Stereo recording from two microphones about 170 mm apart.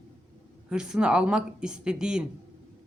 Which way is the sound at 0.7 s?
5° right (ahead or behind).